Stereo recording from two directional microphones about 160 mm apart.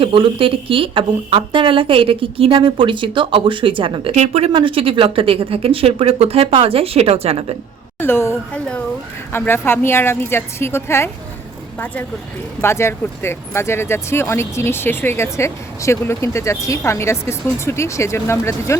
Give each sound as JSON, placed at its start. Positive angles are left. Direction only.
{"t": 0.0, "sound": "speech", "side_deg": -35}
{"t": 7.9, "sound": "speech", "side_deg": 15}
{"t": 12.6, "sound": "speech", "side_deg": 15}